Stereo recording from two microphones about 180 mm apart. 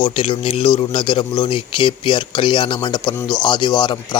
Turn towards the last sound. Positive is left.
turn(degrees=25)  # may be behind; listen again after turning